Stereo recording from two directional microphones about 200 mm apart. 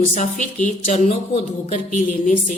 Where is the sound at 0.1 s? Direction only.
40° left (ahead or behind).